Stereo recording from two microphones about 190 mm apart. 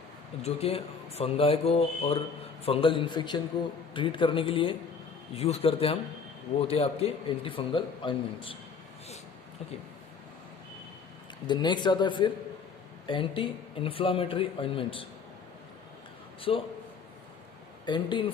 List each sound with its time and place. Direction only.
0.4 s speech: 30° left (ahead or behind)
11.4 s speech: 25° left (ahead or behind)
16.4 s speech: 30° left (ahead or behind)
17.8 s speech: 25° left (ahead or behind)